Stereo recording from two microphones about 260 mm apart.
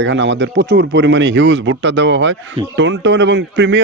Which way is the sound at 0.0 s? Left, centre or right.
Right.